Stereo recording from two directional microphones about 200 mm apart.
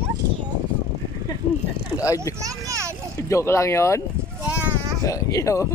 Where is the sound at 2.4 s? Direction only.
15° right (ahead or behind).